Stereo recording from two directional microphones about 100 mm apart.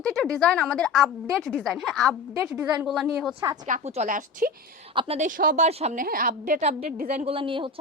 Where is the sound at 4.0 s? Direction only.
90° right.